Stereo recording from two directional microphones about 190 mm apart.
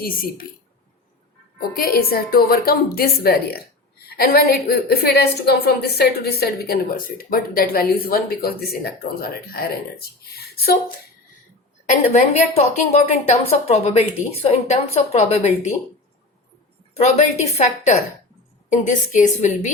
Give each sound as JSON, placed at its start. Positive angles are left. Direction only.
{"t": 0.0, "sound": "a woman's voice", "side_deg": 50}
{"t": 1.5, "sound": "a woman's voice", "side_deg": 50}
{"t": 12.0, "sound": "a woman's voice", "side_deg": 40}
{"t": 16.9, "sound": "a woman's voice", "side_deg": 35}